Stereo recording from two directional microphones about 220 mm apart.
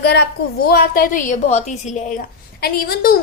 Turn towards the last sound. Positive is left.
turn(degrees=40)  # may be behind; listen again after turning